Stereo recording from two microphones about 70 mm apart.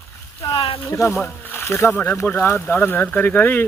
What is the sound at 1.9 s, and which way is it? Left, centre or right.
Speech, left.